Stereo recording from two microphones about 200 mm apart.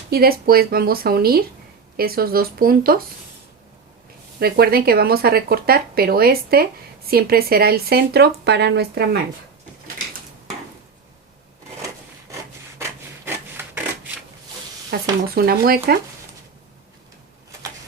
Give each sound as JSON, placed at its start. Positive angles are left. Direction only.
{"t": 0.1, "sound": "speech", "side_deg": -50}
{"t": 4.4, "sound": "speech", "side_deg": -50}
{"t": 12.8, "sound": "rub", "side_deg": -10}
{"t": 14.9, "sound": "a sound", "side_deg": -55}
{"t": 15.4, "sound": "speech", "side_deg": -50}